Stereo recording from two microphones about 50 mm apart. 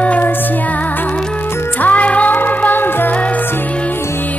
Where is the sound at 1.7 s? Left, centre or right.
Left.